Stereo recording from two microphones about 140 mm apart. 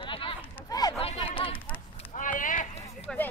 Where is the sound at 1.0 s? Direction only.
40° left (ahead or behind).